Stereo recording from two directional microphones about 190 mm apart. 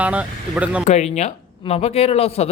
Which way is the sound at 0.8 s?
35° left (ahead or behind).